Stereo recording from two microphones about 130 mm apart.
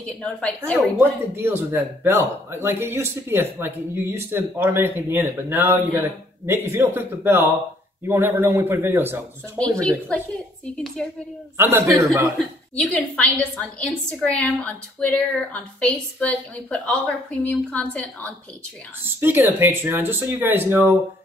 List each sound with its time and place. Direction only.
0.0 s a woman's voice: 10° left (ahead or behind)
0.9 s speech: 15° right (ahead or behind)
9.8 s a woman's voice: 5° left (ahead or behind)
11.5 s a man's voice: 20° right (ahead or behind)
12.4 s a woman's voice: 5° left (ahead or behind)
19.1 s speech: 20° right (ahead or behind)